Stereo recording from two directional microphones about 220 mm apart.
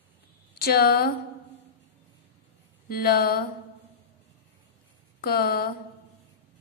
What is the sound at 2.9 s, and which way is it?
Speech, 45° left (ahead or behind).